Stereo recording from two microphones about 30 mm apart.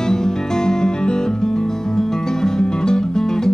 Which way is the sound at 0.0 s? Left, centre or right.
Left.